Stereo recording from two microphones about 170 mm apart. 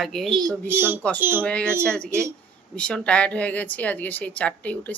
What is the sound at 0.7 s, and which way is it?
Speech, 10° right (ahead or behind).